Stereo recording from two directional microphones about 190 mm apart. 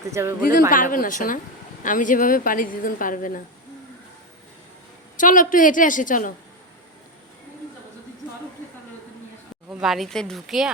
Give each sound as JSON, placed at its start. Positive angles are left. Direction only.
{"t": 0.1, "sound": "speech", "side_deg": -15}
{"t": 0.7, "sound": "a woman's voice", "side_deg": 45}
{"t": 5.1, "sound": "a woman's voice", "side_deg": 45}
{"t": 9.6, "sound": "speech", "side_deg": 0}